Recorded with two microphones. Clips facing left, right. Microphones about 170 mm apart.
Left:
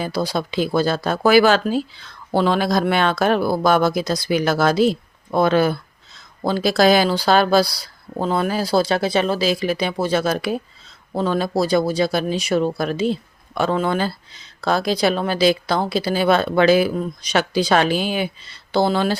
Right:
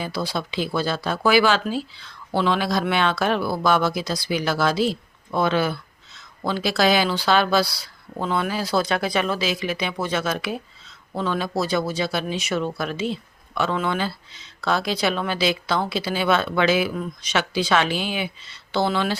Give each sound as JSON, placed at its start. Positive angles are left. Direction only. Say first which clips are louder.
{"t": 0.0, "sound": "speech", "louder": "left 5 dB", "side_deg": 40}